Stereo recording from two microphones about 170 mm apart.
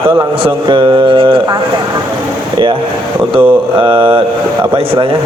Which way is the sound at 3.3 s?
30° right (ahead or behind).